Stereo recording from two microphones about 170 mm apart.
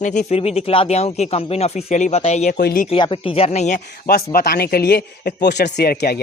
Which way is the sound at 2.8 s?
30° left (ahead or behind).